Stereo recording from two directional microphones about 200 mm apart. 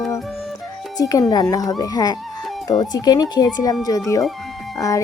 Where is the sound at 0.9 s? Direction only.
20° left (ahead or behind).